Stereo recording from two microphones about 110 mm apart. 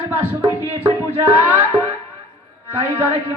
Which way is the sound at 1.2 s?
20° right (ahead or behind).